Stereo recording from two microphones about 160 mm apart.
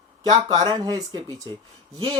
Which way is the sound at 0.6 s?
25° right (ahead or behind).